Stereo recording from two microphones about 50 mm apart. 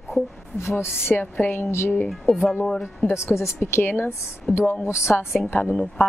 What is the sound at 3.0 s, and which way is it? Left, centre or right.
Speech, left.